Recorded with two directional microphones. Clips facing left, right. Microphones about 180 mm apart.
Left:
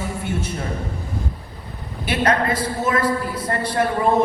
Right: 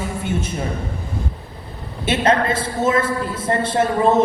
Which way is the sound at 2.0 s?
25° right (ahead or behind).